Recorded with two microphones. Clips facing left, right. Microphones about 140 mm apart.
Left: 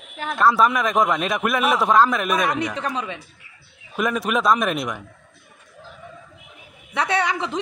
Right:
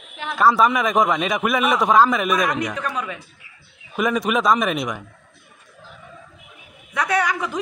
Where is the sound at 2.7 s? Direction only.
30° left (ahead or behind).